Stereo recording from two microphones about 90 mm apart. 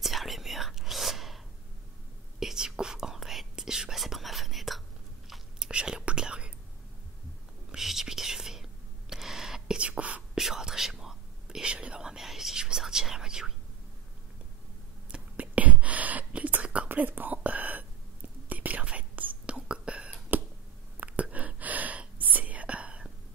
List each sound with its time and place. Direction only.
0.0 s whispering: centre (ahead or behind)
2.4 s whispering: 5° right (ahead or behind)
7.7 s whispering: 5° right (ahead or behind)
10.4 s whispering: 5° right (ahead or behind)
15.0 s whispering: 15° right (ahead or behind)